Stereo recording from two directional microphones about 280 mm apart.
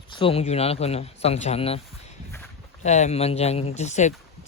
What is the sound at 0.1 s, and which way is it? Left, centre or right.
Speech, centre.